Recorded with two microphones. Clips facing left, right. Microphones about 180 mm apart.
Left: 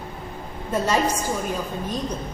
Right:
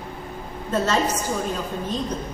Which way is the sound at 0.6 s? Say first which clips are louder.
Even; 10° left (ahead or behind).